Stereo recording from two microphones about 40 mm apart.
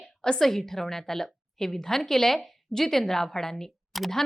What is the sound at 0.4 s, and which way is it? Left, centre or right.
A woman's voice, centre.